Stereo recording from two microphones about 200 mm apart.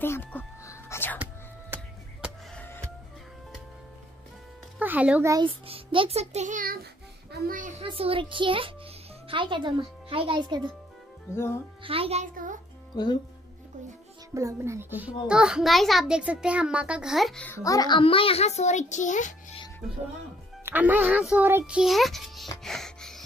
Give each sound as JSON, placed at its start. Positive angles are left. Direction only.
{"t": 0.0, "sound": "whispering", "side_deg": 10}
{"t": 1.1, "sound": "music", "side_deg": -10}
{"t": 2.2, "sound": "music", "side_deg": 5}
{"t": 4.7, "sound": "a child's voice", "side_deg": -5}
{"t": 5.3, "sound": "a child's voice", "side_deg": -25}
{"t": 7.8, "sound": "a child's voice", "side_deg": -25}
{"t": 11.3, "sound": "speech", "side_deg": 15}
{"t": 11.8, "sound": "a child's voice", "side_deg": -30}
{"t": 12.9, "sound": "speech", "side_deg": 20}
{"t": 14.3, "sound": "a child's voice", "side_deg": -15}
{"t": 20.6, "sound": "a child's voice", "side_deg": -10}
{"t": 22.6, "sound": "music", "side_deg": 0}